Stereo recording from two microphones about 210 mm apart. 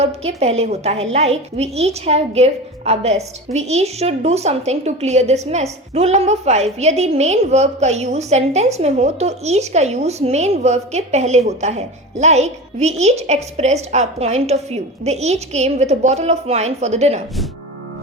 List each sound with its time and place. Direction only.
0.0 s a woman's voice: 30° right (ahead or behind)